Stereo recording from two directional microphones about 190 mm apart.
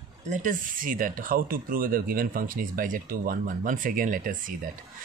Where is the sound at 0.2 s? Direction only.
40° right (ahead or behind).